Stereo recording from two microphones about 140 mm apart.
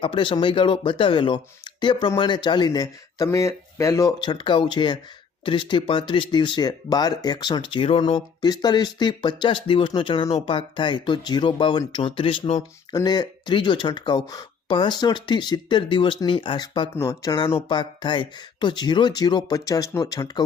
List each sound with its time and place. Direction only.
0.0 s speech: 35° left (ahead or behind)
12.9 s speech: 30° left (ahead or behind)
16.9 s speech: 20° left (ahead or behind)